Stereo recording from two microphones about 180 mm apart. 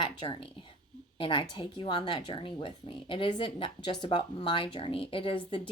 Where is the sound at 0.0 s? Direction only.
30° left (ahead or behind).